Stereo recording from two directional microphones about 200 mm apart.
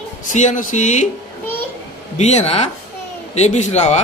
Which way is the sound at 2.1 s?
35° left (ahead or behind).